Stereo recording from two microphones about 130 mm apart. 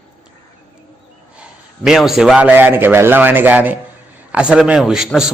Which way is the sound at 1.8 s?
5° right (ahead or behind).